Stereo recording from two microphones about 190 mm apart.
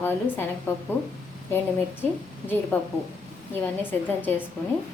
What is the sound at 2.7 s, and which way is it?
Speech, 10° left (ahead or behind).